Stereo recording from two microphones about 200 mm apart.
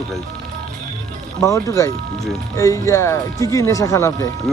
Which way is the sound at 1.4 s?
15° left (ahead or behind).